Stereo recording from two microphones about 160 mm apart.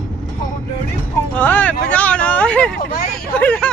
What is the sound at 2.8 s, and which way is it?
Speech, 70° left (ahead or behind).